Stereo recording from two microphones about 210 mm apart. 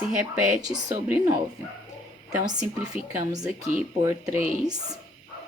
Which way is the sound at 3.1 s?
15° right (ahead or behind).